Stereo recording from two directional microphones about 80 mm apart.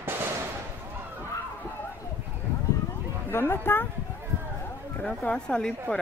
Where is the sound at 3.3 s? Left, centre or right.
Left.